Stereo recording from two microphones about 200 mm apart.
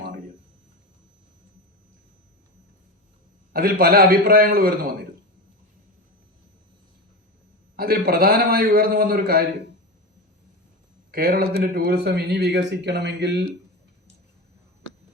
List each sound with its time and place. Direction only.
3.5 s a man's voice: 50° right (ahead or behind)
7.8 s a man's voice: 50° right (ahead or behind)
11.1 s speech: 50° right (ahead or behind)